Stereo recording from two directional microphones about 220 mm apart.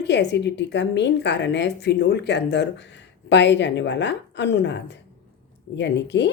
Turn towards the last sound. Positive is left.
turn(degrees=50)  # may be behind; listen again after turning